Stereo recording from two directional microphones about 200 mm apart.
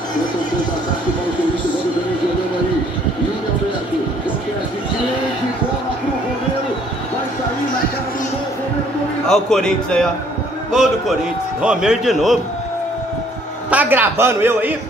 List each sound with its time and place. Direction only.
9.3 s a man's voice: 5° left (ahead or behind)
13.7 s a man's voice: 10° right (ahead or behind)